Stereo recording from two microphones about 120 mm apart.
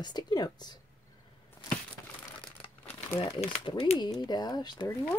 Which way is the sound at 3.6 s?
40° left (ahead or behind).